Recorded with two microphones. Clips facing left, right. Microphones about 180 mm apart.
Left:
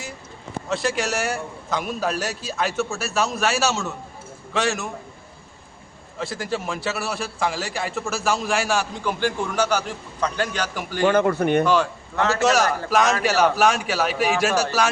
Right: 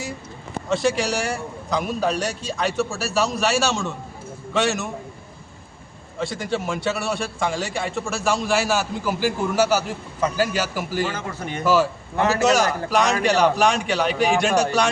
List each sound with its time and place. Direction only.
0.7 s a man's voice: centre (ahead or behind)
6.1 s a man's voice: centre (ahead or behind)
11.0 s speech: 60° left (ahead or behind)
11.6 s a man's voice: 5° right (ahead or behind)